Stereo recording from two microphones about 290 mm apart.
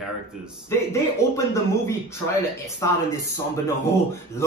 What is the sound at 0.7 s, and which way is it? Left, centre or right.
Speech, centre.